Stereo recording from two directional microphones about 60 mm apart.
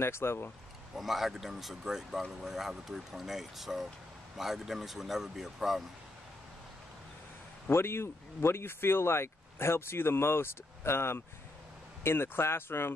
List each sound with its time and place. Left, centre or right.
0.0 s speech: left
0.9 s speech: centre
7.7 s speech: left